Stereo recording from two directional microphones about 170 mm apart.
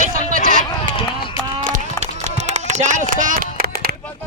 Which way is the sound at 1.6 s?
45° right (ahead or behind).